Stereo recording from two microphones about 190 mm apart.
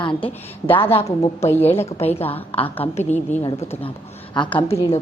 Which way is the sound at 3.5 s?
15° left (ahead or behind).